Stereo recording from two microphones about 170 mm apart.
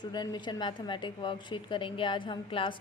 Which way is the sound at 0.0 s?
25° left (ahead or behind).